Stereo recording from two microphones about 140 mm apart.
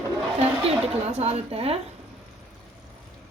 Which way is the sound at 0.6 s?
50° right (ahead or behind).